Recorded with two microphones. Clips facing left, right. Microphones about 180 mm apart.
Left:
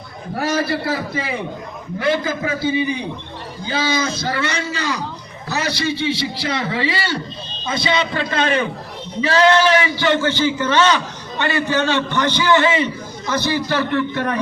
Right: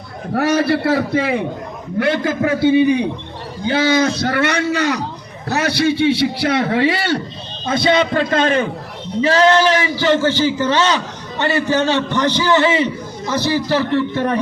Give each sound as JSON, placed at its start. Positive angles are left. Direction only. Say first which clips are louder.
{"t": 0.3, "sound": "a man's voice", "louder": "right 5 dB", "side_deg": -65}